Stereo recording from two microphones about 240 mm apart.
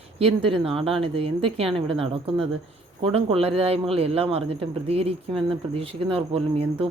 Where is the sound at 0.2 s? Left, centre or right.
Right.